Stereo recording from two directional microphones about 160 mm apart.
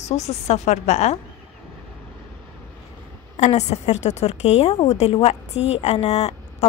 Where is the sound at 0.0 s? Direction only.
45° left (ahead or behind).